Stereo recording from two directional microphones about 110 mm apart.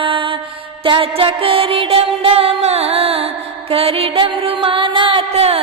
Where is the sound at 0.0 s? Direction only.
50° right (ahead or behind).